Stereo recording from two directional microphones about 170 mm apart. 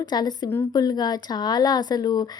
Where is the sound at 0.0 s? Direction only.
25° left (ahead or behind).